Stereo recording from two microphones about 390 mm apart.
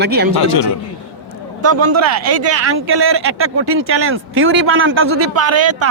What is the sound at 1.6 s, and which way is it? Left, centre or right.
A man's voice, right.